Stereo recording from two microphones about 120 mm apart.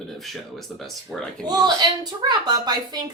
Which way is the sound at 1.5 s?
35° right (ahead or behind).